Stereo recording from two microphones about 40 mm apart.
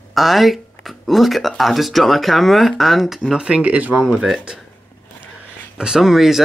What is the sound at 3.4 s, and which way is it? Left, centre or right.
Speech, right.